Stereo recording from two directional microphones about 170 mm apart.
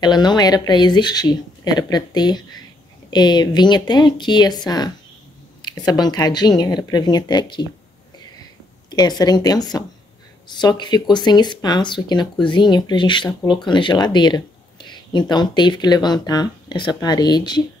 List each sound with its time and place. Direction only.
0.0 s speech: 25° left (ahead or behind)
8.9 s speech: 25° left (ahead or behind)